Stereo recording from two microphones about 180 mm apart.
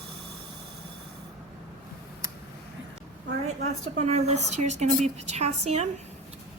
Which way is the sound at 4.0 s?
40° right (ahead or behind).